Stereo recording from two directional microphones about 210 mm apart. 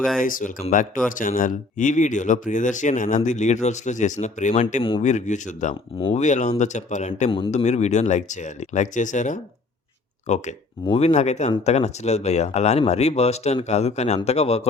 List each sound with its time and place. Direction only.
0.2 s speech: 40° left (ahead or behind)